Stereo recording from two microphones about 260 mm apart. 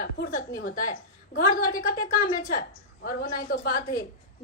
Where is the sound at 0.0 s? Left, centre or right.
Left.